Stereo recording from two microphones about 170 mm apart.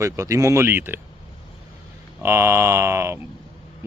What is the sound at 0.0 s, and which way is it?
Speech, 20° right (ahead or behind).